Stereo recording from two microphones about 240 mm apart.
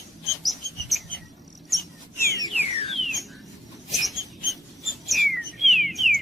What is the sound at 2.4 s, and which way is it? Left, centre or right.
Alarm, left.